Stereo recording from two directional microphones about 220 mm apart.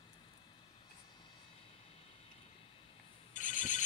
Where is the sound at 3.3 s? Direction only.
35° left (ahead or behind).